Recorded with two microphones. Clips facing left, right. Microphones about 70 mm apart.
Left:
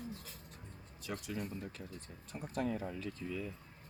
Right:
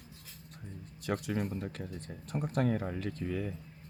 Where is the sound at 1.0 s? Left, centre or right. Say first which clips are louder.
Right 8 dB; right.